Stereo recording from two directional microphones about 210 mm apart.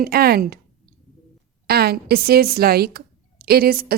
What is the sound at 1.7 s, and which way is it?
Speech, 50° right (ahead or behind).